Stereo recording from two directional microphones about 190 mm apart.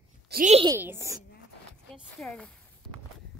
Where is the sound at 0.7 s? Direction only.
10° right (ahead or behind).